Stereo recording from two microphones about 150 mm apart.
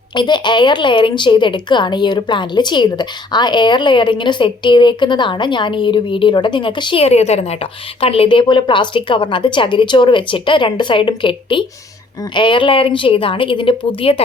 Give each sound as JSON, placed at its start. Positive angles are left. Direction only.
{"t": 0.1, "sound": "a woman's voice", "side_deg": 30}